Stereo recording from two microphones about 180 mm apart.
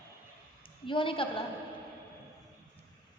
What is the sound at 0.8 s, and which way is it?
Speech, 30° left (ahead or behind).